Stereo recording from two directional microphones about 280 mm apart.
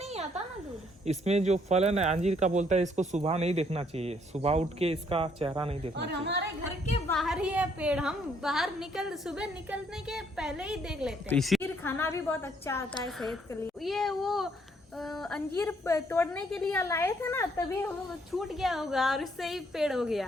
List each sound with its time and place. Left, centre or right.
1.0 s speech: right
6.0 s a woman's voice: right
7.1 s a woman's voice: centre
13.1 s a woman's voice: centre
18.3 s a woman's voice: centre